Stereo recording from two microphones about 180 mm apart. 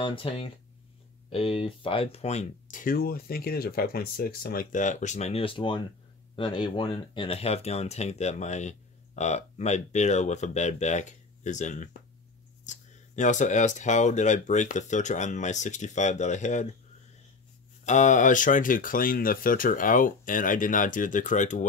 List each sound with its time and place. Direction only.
0.0 s speech: 30° left (ahead or behind)
17.8 s speech: 45° left (ahead or behind)